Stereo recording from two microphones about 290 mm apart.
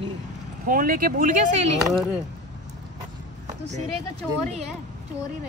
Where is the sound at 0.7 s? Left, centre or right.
Right.